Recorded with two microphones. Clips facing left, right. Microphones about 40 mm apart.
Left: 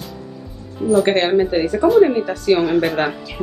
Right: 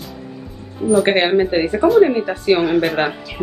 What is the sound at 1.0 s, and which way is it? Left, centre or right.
Speech, right.